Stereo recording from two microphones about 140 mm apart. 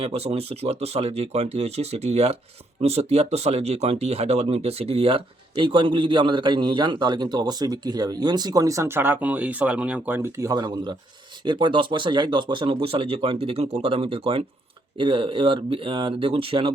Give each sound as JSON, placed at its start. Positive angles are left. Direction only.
{"t": 0.0, "sound": "speech", "side_deg": -45}